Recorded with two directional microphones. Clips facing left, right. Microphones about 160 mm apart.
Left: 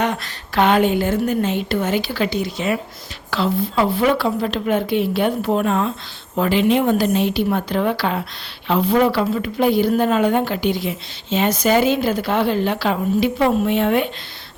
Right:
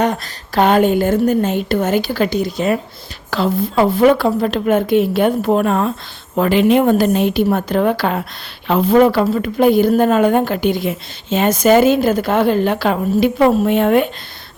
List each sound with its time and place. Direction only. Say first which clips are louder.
0.0 s speech: right 4 dB; 40° right (ahead or behind)